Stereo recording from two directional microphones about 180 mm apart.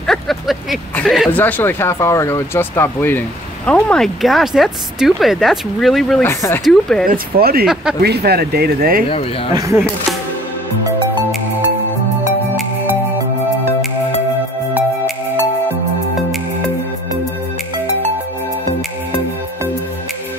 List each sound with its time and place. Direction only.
0.0 s vehicle: centre (ahead or behind)
1.3 s speech: 10° left (ahead or behind)
6.2 s speech: 15° left (ahead or behind)
6.6 s speech: centre (ahead or behind)
7.1 s speech: 55° right (ahead or behind)
9.5 s speech: 20° right (ahead or behind)